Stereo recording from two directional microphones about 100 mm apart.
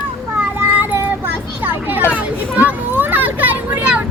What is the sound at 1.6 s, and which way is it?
A child's voice, 20° right (ahead or behind).